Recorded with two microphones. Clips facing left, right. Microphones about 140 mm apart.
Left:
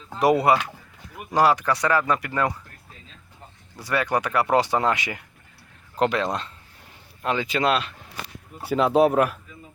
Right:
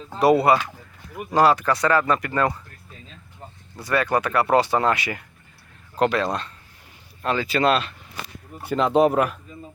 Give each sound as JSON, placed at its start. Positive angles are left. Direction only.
{"t": 0.2, "sound": "speech", "side_deg": 15}
{"t": 3.8, "sound": "speech", "side_deg": 15}